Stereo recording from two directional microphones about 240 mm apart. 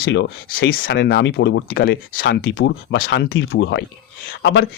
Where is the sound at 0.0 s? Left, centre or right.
Left.